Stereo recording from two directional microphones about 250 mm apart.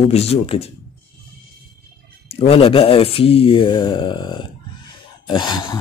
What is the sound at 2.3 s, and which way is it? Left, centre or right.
Speech, left.